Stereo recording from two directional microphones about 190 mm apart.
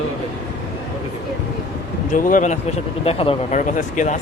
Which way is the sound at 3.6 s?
40° left (ahead or behind).